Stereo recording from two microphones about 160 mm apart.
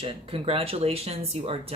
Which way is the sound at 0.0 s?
35° right (ahead or behind).